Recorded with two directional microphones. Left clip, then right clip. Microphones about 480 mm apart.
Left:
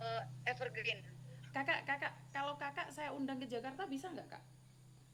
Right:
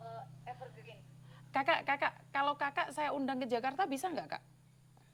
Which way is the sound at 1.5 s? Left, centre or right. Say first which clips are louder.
Right 6 dB; right.